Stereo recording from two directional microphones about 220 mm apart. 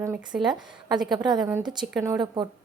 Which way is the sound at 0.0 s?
15° right (ahead or behind).